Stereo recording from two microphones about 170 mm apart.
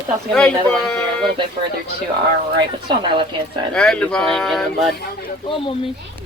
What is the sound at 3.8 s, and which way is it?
Speech, 5° left (ahead or behind).